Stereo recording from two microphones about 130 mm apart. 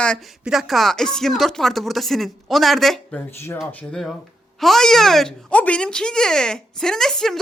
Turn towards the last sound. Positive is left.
turn(degrees=5)  # may be behind; listen again after turning